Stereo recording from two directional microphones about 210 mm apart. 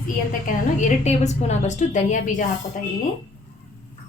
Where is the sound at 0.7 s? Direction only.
35° left (ahead or behind).